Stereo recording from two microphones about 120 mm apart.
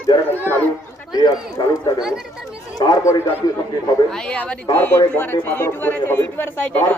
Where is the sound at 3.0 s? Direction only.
25° left (ahead or behind).